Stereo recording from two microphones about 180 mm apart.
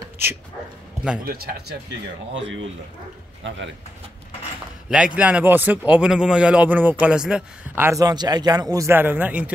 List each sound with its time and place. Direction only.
1.2 s speech: 60° right (ahead or behind)
2.3 s speech: 90° right
4.8 s a man's voice: 5° right (ahead or behind)